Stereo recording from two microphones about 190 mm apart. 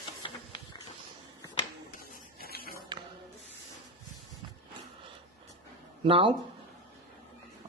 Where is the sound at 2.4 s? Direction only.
50° left (ahead or behind).